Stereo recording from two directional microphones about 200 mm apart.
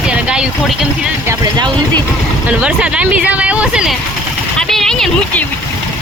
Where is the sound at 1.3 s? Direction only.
20° right (ahead or behind).